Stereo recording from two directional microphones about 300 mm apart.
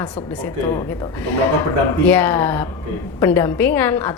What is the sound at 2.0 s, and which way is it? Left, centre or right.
A woman's voice, centre.